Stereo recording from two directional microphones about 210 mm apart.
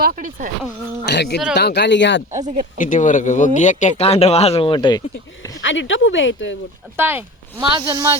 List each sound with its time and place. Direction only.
0.0 s speech: 40° right (ahead or behind)
1.0 s speech: 55° left (ahead or behind)
2.3 s speech: 35° right (ahead or behind)
2.7 s speech: 40° left (ahead or behind); by 5.5 s 20° left (ahead or behind)
5.6 s speech: 60° left (ahead or behind)
6.9 s speech: 10° right (ahead or behind)